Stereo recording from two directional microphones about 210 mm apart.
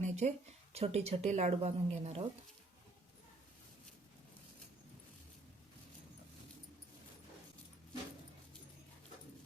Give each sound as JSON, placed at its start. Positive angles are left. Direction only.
{"t": 0.0, "sound": "a woman's voice", "side_deg": -35}